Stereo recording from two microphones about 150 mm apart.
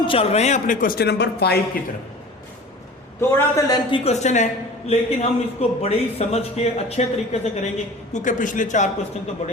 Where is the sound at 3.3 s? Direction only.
25° left (ahead or behind).